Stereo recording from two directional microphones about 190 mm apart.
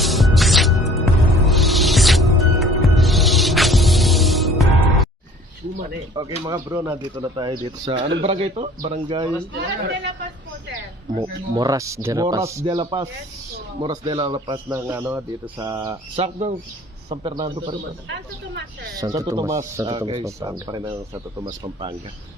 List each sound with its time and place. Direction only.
0.0 s music: centre (ahead or behind)
6.4 s a man's voice: 15° right (ahead or behind)
9.6 s speech: 65° right (ahead or behind)
11.2 s a man's voice: 20° right (ahead or behind)
18.9 s speech: 20° right (ahead or behind)
19.9 s a man's voice: 25° right (ahead or behind)